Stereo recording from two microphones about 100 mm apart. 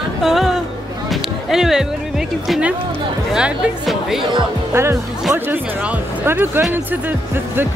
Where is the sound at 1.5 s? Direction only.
5° right (ahead or behind).